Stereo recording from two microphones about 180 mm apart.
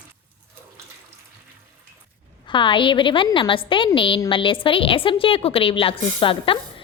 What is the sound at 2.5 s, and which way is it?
A woman's voice, 25° left (ahead or behind).